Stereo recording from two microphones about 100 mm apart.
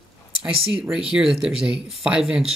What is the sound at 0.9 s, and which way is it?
Speech, 5° right (ahead or behind).